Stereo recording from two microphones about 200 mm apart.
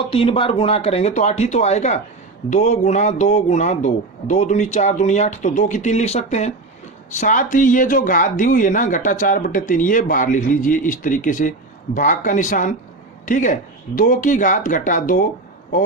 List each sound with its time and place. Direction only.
0.1 s speech: 25° left (ahead or behind); by 15.3 s 40° left (ahead or behind)